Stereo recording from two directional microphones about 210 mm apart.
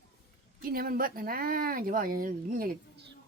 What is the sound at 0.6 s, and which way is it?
Speech, 45° right (ahead or behind).